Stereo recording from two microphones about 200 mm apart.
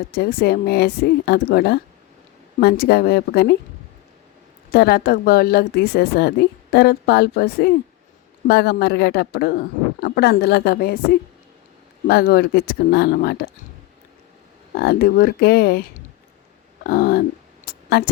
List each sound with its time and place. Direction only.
0.1 s a woman's voice: 50° left (ahead or behind)
4.7 s a woman's voice: 50° left (ahead or behind)
14.8 s a woman's voice: 50° left (ahead or behind)